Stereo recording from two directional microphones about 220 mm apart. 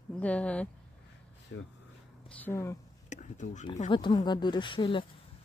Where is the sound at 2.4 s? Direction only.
10° left (ahead or behind).